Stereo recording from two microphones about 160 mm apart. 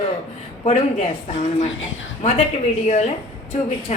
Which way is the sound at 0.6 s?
45° left (ahead or behind).